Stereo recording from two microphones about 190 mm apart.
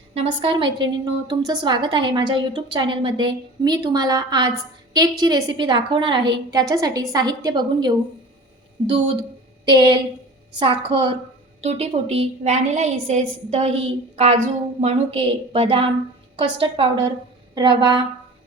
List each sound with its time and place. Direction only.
0.1 s a woman's voice: 30° right (ahead or behind)
9.6 s a woman's voice: 25° right (ahead or behind)